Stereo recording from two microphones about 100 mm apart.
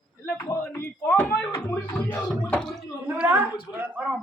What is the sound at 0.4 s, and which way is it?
Speech, 30° left (ahead or behind).